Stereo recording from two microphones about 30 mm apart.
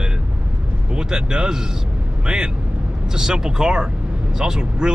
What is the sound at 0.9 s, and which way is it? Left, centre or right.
Speech, right.